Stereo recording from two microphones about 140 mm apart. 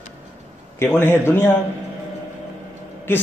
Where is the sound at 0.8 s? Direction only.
15° left (ahead or behind).